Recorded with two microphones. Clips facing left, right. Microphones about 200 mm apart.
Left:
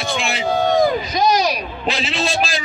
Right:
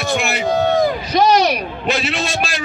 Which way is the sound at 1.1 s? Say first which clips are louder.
Right 3 dB; 70° right (ahead or behind).